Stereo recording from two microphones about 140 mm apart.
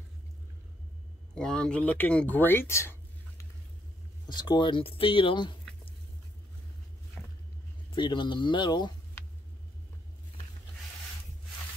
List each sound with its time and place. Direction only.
1.3 s speech: 5° left (ahead or behind)
4.3 s speech: 30° left (ahead or behind)
7.9 s speech: 35° left (ahead or behind)